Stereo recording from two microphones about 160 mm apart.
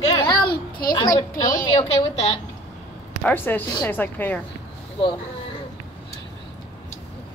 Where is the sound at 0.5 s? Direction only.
65° left (ahead or behind).